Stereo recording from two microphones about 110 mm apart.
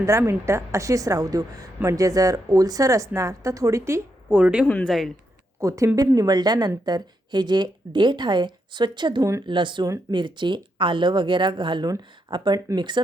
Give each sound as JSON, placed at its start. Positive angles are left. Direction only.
{"t": 0.0, "sound": "a woman's voice", "side_deg": -25}
{"t": 4.3, "sound": "speech", "side_deg": -10}
{"t": 4.7, "sound": "speech", "side_deg": 10}
{"t": 5.5, "sound": "a woman's voice", "side_deg": -30}